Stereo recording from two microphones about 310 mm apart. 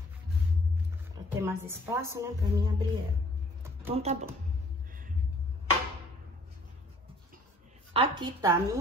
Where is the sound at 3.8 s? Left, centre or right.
Centre.